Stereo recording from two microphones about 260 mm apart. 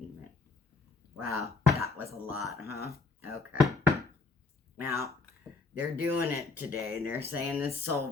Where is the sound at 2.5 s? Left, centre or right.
Left.